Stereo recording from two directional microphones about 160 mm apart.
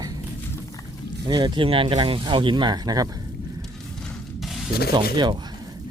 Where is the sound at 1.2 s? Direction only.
30° right (ahead or behind).